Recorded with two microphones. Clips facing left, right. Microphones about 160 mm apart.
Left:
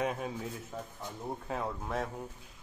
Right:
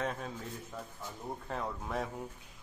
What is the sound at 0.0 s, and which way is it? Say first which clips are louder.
Speech: left 3 dB; 10° left (ahead or behind).